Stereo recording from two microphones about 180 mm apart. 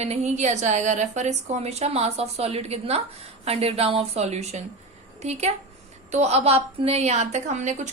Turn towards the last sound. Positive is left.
turn(degrees=-40)  # may be behind; listen again after turning